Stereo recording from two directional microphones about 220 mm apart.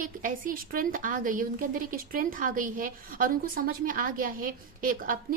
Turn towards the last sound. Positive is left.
turn(degrees=-40)  # may be behind; listen again after turning